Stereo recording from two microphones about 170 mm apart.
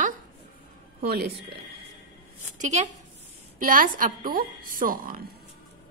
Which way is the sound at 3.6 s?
55° right (ahead or behind).